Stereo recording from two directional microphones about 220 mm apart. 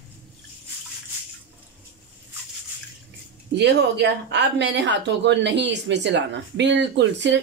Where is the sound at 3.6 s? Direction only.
50° right (ahead or behind).